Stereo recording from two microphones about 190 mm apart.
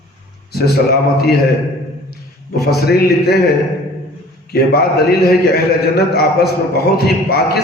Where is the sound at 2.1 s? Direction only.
55° left (ahead or behind).